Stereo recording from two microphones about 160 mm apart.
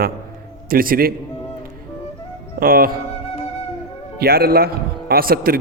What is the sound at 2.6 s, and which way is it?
Speech, 65° right (ahead or behind).